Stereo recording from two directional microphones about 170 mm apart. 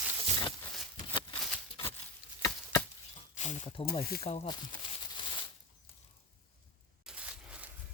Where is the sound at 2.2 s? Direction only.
55° left (ahead or behind).